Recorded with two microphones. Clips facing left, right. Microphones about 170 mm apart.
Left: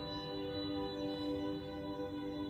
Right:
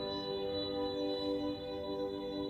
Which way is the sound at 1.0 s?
25° right (ahead or behind).